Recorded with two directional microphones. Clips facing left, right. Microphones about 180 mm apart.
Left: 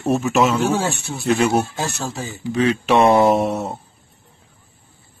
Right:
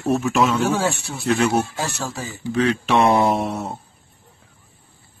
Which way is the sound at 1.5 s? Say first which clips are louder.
Left 2 dB; 25° left (ahead or behind).